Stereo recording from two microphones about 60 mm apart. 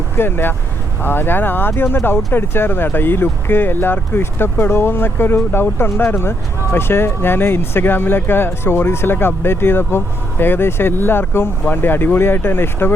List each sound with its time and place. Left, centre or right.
0.2 s speech: left